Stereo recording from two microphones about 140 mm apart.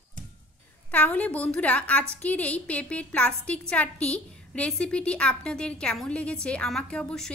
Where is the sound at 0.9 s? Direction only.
10° left (ahead or behind).